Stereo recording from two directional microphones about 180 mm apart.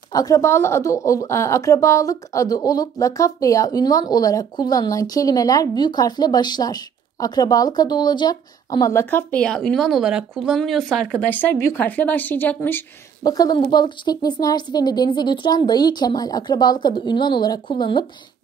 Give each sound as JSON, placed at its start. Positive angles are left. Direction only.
{"t": 0.1, "sound": "a woman's voice", "side_deg": 20}